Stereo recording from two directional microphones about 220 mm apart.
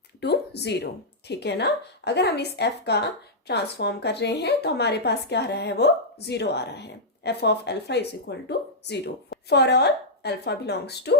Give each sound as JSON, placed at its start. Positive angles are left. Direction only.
{"t": 0.2, "sound": "a woman's voice", "side_deg": 50}